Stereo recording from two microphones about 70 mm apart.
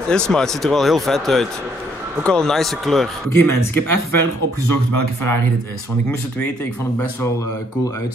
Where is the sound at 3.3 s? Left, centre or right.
Left.